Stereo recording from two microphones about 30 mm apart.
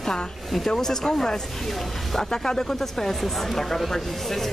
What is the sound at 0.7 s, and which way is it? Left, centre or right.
Speech, centre.